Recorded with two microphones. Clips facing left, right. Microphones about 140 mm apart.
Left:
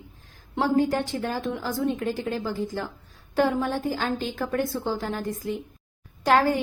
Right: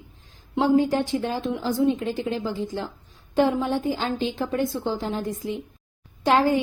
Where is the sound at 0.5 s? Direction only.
20° right (ahead or behind).